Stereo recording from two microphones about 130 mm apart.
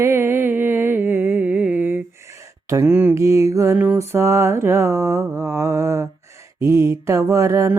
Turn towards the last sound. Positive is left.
turn(degrees=-25)  # may be behind; listen again after turning